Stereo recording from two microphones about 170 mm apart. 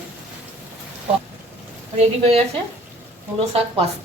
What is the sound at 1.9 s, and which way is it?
Speech, 35° right (ahead or behind).